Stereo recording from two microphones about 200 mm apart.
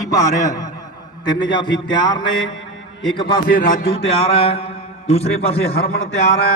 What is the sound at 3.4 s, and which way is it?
Speech, 45° left (ahead or behind).